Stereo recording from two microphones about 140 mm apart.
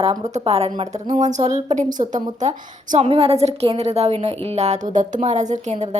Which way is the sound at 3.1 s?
45° right (ahead or behind).